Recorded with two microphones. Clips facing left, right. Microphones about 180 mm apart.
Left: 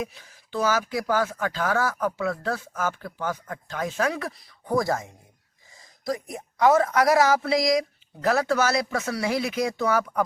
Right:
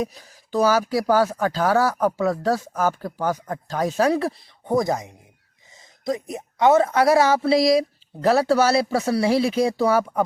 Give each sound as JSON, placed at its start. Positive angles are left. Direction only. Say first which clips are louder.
{"t": 0.0, "sound": "speech", "louder": "right 5 dB", "side_deg": -40}